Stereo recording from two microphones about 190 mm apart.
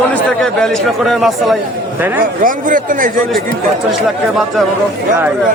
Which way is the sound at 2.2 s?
45° right (ahead or behind).